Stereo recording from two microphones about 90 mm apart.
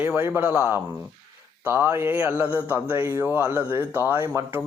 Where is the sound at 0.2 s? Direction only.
25° right (ahead or behind).